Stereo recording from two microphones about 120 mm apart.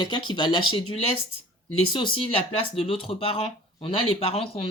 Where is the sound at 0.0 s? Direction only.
40° left (ahead or behind).